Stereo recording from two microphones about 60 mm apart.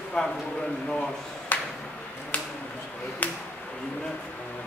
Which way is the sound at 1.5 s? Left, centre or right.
Left.